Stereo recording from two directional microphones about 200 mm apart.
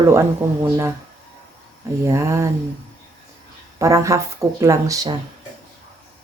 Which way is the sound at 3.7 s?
15° right (ahead or behind).